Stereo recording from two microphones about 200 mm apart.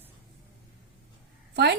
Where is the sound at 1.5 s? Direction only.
55° right (ahead or behind).